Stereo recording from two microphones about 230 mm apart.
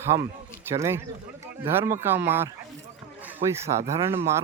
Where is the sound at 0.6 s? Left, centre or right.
Centre.